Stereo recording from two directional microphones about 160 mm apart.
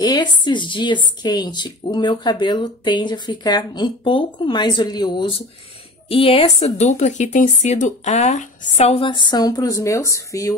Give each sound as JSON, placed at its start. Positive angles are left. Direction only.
{"t": 0.0, "sound": "speech", "side_deg": 25}